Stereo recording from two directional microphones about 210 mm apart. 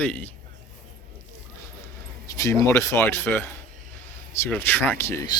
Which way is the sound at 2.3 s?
15° left (ahead or behind).